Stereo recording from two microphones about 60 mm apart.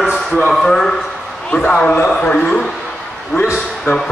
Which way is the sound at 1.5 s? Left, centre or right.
Left.